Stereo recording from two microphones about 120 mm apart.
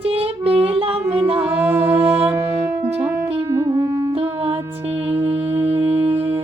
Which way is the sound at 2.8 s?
15° right (ahead or behind).